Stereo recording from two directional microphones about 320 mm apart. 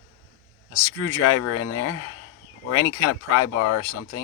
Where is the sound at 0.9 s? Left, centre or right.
Left.